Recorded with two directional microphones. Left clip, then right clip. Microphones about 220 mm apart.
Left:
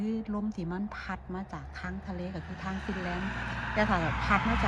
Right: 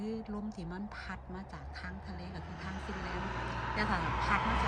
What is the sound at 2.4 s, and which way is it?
Speech, 45° right (ahead or behind).